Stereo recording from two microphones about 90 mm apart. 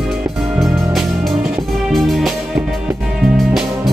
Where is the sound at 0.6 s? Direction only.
Centre (ahead or behind).